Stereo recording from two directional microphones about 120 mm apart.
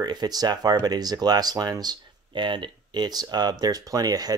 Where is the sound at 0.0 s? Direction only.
35° right (ahead or behind).